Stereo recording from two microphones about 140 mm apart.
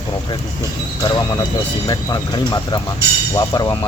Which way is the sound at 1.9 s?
30° left (ahead or behind).